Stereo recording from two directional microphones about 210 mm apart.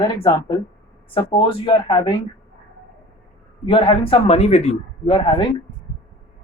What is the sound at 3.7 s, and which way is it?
A man's voice, 25° left (ahead or behind).